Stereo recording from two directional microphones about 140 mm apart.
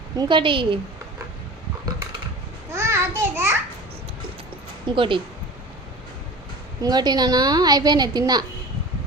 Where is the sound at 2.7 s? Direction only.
20° right (ahead or behind).